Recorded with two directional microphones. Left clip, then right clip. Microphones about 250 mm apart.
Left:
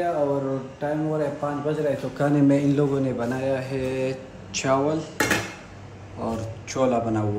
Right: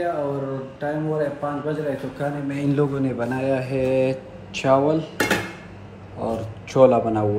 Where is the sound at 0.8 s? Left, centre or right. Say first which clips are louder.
Right 1 dB; centre.